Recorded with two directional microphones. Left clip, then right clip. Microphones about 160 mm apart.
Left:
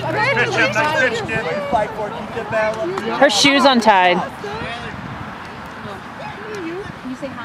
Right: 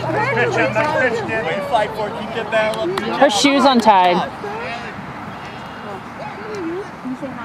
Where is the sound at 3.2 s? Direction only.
5° left (ahead or behind).